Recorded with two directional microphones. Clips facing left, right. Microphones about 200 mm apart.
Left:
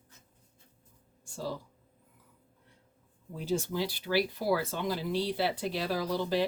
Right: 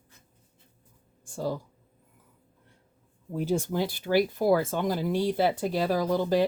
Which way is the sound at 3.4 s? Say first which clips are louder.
Right 4 dB; 55° right (ahead or behind).